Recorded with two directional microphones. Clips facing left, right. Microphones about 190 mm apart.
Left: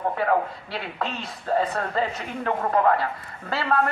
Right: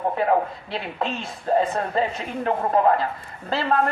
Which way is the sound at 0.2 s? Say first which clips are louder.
Right 3 dB; 20° right (ahead or behind).